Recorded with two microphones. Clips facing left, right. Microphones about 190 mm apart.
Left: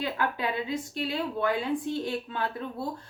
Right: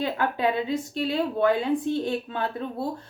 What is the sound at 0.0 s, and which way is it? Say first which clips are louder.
A woman's voice: right 5 dB; 25° right (ahead or behind).